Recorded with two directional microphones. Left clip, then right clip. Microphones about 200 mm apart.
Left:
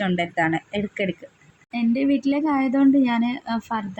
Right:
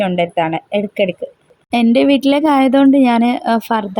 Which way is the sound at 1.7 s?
45° right (ahead or behind).